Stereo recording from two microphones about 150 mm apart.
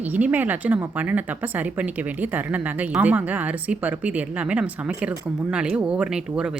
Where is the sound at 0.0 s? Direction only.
10° right (ahead or behind).